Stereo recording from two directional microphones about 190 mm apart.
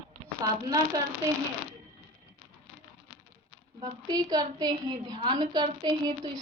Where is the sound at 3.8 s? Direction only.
20° right (ahead or behind).